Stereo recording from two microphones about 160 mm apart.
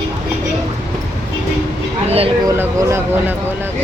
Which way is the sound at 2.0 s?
40° right (ahead or behind).